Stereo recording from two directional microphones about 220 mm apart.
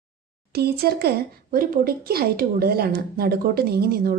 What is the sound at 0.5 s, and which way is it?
A woman's voice, 45° right (ahead or behind).